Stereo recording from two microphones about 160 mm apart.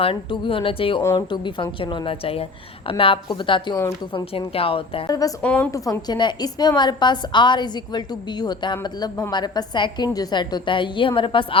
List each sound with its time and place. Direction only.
0.0 s a woman's voice: 35° left (ahead or behind)
3.8 s a woman's voice: 20° left (ahead or behind)
4.1 s a woman's voice: 35° left (ahead or behind)
5.4 s a woman's voice: 10° left (ahead or behind)
5.7 s a woman's voice: 20° left (ahead or behind)